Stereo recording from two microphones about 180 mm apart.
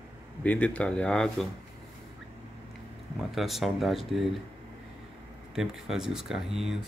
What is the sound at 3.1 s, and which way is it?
Speech, centre (ahead or behind).